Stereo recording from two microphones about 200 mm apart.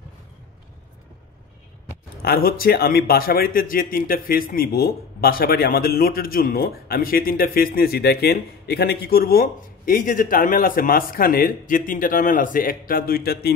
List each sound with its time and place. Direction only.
2.2 s speech: 50° left (ahead or behind)